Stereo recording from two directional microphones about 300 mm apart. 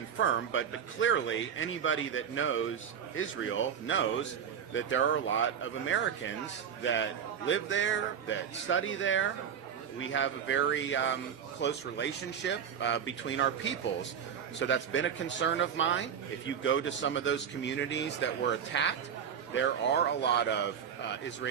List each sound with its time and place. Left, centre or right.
0.2 s speech: left
14.6 s speech: left